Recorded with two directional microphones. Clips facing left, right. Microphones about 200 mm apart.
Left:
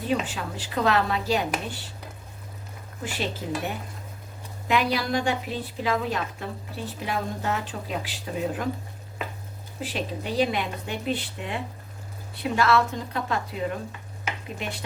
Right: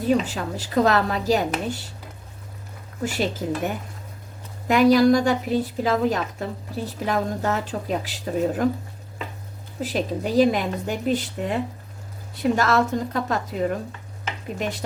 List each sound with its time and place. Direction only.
0.1 s a woman's voice: 40° right (ahead or behind)
3.0 s a woman's voice: 45° right (ahead or behind)
4.7 s a woman's voice: 45° right (ahead or behind)
9.8 s a woman's voice: 40° right (ahead or behind)